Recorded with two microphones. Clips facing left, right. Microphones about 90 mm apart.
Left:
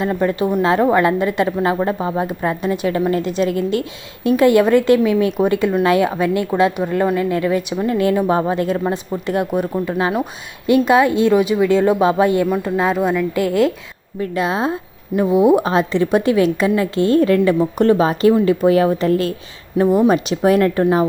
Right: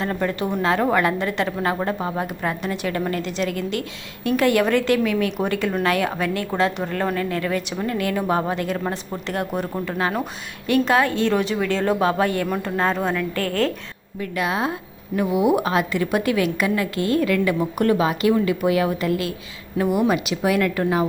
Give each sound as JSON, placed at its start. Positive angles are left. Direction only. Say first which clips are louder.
{"t": 0.0, "sound": "a woman's voice", "louder": "left 6 dB", "side_deg": 15}
{"t": 12.5, "sound": "a woman's voice", "louder": "left 5 dB", "side_deg": 5}
{"t": 14.2, "sound": "a woman's voice", "louder": "left 4 dB", "side_deg": 25}